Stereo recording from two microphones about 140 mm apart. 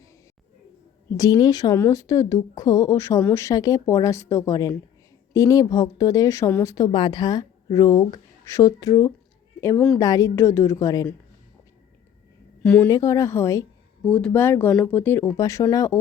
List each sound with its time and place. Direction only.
1.1 s speech: 25° left (ahead or behind)
12.6 s speech: 10° left (ahead or behind)
12.9 s speech: 20° left (ahead or behind)
14.0 s speech: 10° left (ahead or behind)